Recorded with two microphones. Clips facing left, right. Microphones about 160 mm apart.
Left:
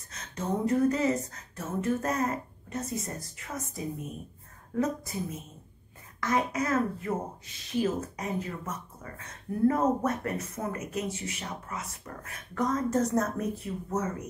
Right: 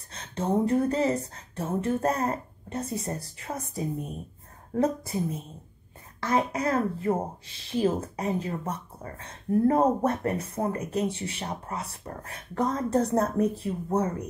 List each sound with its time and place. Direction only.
0.1 s speech: 30° right (ahead or behind)